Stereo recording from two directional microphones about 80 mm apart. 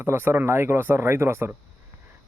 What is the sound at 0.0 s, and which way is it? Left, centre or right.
Speech, right.